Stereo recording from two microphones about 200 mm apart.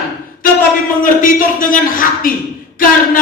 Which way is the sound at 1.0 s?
40° left (ahead or behind).